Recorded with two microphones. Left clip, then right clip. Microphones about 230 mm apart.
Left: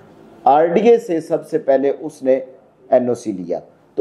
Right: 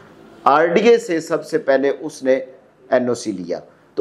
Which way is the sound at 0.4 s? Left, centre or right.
Right.